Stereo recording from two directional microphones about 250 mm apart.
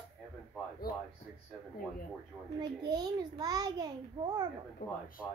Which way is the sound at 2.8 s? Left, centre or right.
Centre.